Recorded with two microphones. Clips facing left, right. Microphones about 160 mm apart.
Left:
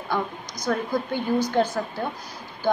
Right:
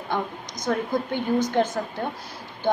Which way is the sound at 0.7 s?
20° right (ahead or behind).